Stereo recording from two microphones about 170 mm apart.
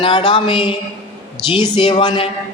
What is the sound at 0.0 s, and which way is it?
A man's voice, 30° left (ahead or behind).